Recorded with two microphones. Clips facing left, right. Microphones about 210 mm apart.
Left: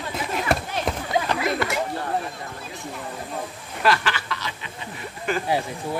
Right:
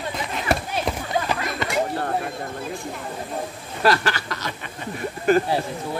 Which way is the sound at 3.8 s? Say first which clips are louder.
Right 2 dB; 40° right (ahead or behind).